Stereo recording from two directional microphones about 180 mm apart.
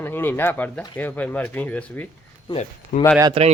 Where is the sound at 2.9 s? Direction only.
50° left (ahead or behind).